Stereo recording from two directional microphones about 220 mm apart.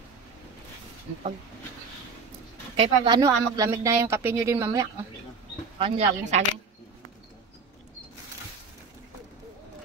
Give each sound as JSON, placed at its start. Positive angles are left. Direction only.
{"t": 2.7, "sound": "speech", "side_deg": -20}
{"t": 5.8, "sound": "speech", "side_deg": -25}